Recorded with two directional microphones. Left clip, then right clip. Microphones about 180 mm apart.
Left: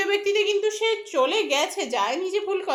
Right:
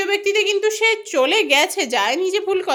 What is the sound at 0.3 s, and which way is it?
A woman's voice, 45° right (ahead or behind).